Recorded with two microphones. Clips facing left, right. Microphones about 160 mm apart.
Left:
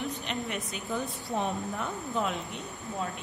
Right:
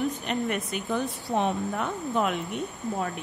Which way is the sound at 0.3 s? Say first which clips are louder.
Right 6 dB; 55° right (ahead or behind).